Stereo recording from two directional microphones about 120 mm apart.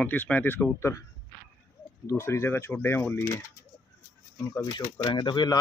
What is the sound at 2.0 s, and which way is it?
Speech, 25° left (ahead or behind).